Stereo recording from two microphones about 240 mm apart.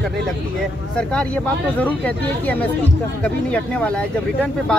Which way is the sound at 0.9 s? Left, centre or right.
Centre.